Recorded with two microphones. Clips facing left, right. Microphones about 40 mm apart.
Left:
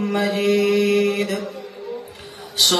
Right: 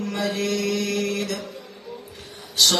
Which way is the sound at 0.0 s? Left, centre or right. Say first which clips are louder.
Left 5 dB; left.